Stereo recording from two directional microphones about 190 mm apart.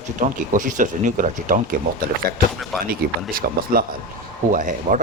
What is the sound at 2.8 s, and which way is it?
Speech, 50° right (ahead or behind).